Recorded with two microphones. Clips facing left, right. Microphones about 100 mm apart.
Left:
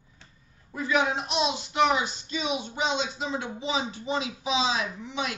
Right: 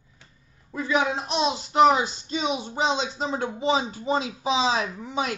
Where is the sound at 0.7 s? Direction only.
25° right (ahead or behind).